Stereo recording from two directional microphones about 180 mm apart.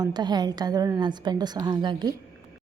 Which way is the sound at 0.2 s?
25° right (ahead or behind).